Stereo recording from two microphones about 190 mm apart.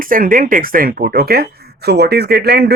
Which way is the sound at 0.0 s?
45° right (ahead or behind).